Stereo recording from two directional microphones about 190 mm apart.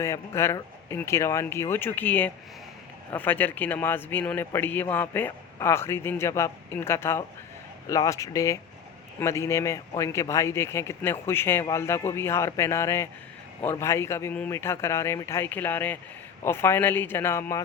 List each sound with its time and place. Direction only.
0.0 s a man's voice: 15° left (ahead or behind)